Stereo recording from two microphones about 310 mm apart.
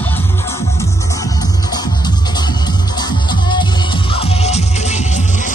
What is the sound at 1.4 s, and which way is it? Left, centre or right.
Music, centre.